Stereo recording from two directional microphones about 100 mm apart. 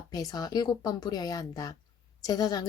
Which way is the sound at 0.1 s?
40° left (ahead or behind).